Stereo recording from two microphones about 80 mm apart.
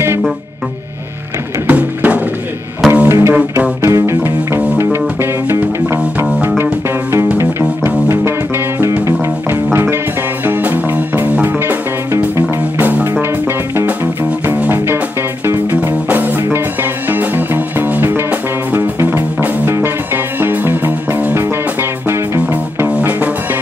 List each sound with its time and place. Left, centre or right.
1.7 s music: right
2.9 s music: right
8.7 s music: right
12.7 s music: right
15.4 s music: right
22.8 s music: centre